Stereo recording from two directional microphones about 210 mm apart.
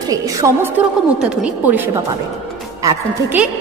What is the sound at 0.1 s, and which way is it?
Speech, 15° right (ahead or behind).